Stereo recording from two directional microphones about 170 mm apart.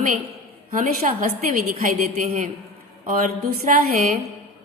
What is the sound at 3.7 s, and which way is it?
Speech, 50° right (ahead or behind).